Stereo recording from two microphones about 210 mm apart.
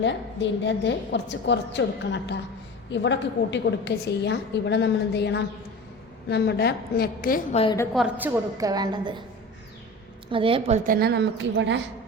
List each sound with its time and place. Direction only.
0.0 s a woman's voice: 60° left (ahead or behind); by 7.4 s 45° left (ahead or behind)
7.5 s a woman's voice: 25° left (ahead or behind)
7.9 s a woman's voice: 5° right (ahead or behind)
10.3 s a woman's voice: 25° right (ahead or behind)
10.8 s a woman's voice: 45° right (ahead or behind)